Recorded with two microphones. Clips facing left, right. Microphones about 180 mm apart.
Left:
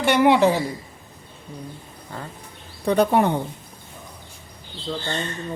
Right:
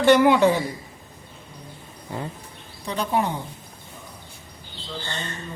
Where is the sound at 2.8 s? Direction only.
60° left (ahead or behind).